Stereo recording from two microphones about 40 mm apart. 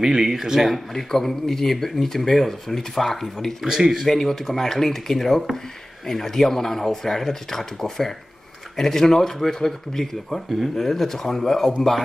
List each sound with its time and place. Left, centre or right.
0.0 s speech: centre
3.6 s speech: centre
4.0 s speech: centre